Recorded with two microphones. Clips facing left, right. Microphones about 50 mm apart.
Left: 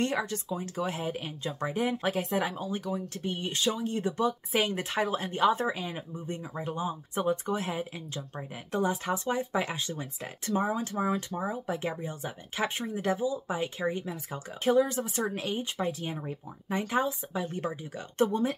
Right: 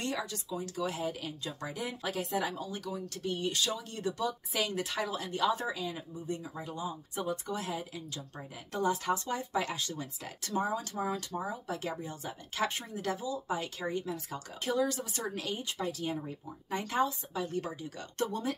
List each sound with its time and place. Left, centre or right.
0.0 s speech: left